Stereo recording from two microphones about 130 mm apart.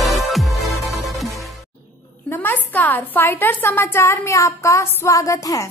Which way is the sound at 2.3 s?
15° left (ahead or behind).